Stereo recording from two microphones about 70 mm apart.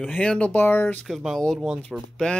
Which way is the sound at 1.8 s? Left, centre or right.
Centre.